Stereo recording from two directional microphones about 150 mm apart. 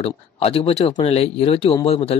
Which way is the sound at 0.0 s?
40° left (ahead or behind).